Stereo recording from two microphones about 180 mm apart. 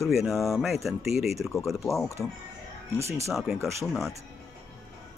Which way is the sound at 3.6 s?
15° right (ahead or behind).